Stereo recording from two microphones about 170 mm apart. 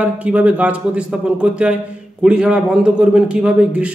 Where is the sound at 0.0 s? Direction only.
10° right (ahead or behind).